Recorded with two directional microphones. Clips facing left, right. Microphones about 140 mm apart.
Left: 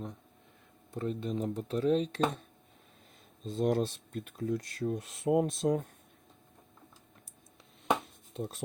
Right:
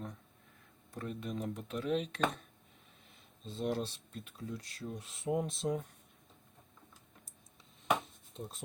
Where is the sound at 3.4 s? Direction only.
45° left (ahead or behind).